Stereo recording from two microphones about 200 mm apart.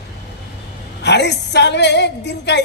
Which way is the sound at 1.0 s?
60° left (ahead or behind).